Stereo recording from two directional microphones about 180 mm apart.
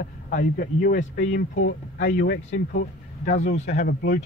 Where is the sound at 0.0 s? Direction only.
50° left (ahead or behind).